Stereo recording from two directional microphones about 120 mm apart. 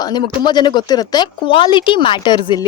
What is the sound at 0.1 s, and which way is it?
Speech, 35° left (ahead or behind).